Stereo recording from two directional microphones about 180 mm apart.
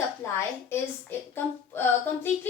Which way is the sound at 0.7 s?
10° left (ahead or behind).